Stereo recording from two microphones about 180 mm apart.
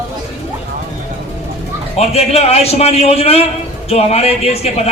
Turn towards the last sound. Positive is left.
turn(degrees=35)  # may be behind; listen again after turning